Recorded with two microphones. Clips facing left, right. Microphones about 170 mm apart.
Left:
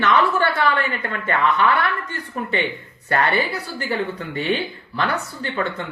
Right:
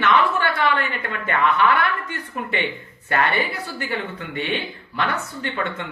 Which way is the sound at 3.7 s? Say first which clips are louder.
Left 5 dB; 35° left (ahead or behind).